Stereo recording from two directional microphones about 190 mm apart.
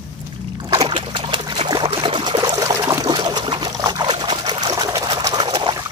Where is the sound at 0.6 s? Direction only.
25° right (ahead or behind).